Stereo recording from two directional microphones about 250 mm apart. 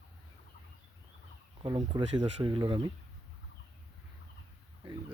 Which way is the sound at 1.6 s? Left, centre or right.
Centre.